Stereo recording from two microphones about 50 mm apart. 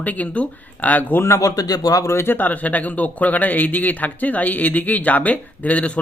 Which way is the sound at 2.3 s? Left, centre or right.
Left.